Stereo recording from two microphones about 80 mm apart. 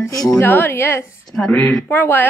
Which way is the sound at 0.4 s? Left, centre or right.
Left.